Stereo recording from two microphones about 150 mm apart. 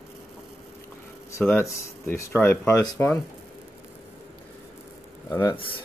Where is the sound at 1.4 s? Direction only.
15° left (ahead or behind).